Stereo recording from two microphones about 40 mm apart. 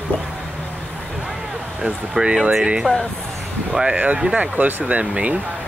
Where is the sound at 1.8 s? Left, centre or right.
Right.